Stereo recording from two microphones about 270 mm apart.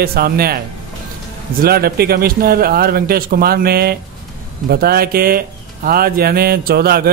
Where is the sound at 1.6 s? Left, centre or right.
Right.